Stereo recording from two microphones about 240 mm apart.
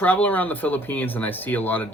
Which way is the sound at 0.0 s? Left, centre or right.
Centre.